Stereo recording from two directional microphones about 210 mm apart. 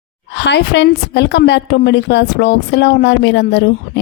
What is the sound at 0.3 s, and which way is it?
A woman's voice, 55° left (ahead or behind).